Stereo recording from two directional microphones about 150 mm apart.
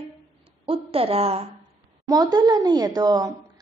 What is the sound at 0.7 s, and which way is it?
Speech, 40° right (ahead or behind).